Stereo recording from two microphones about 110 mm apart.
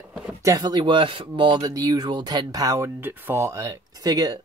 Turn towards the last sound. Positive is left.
turn(degrees=-35)  # may be behind; listen again after turning